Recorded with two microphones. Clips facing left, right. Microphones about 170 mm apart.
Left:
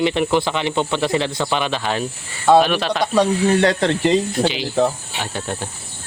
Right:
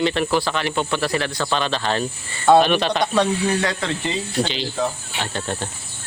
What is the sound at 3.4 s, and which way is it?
Speech, 35° left (ahead or behind).